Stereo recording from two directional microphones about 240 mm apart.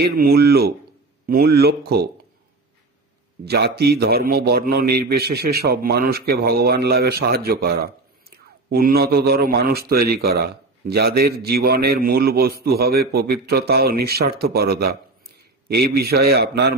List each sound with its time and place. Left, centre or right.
0.0 s a man's voice: right
3.4 s a man's voice: right